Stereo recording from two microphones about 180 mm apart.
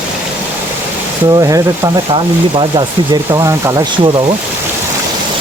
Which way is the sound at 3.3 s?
20° right (ahead or behind).